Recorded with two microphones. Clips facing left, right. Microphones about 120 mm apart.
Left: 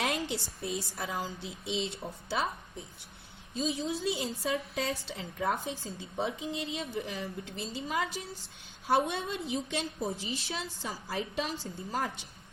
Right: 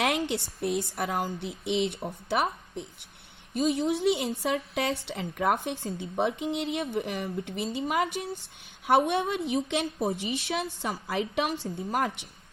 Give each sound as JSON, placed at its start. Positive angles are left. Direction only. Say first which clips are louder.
{"t": 0.0, "sound": "a woman's voice", "louder": "right 5 dB", "side_deg": -60}